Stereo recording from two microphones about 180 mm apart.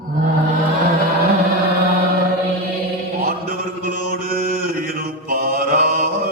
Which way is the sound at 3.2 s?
50° right (ahead or behind).